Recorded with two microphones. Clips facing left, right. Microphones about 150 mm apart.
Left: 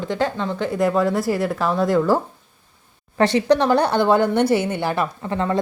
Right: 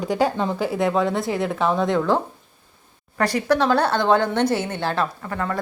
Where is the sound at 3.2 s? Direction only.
25° left (ahead or behind).